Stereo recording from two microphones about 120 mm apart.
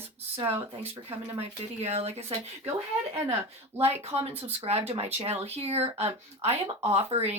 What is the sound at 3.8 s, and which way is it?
Speech, 55° right (ahead or behind).